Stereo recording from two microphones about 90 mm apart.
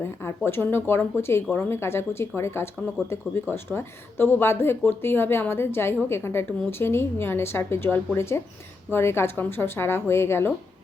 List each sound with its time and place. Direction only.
0.0 s speech: 25° left (ahead or behind)